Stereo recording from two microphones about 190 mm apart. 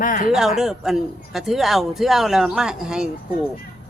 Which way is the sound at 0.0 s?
45° left (ahead or behind).